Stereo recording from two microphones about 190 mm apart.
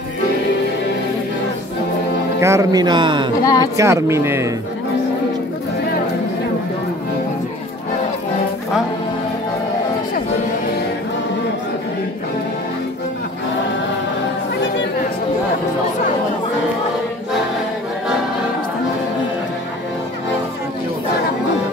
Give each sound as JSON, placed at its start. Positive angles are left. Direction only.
{"t": 2.4, "sound": "speech", "side_deg": -15}
{"t": 3.4, "sound": "speech", "side_deg": 20}
{"t": 3.7, "sound": "speech", "side_deg": -15}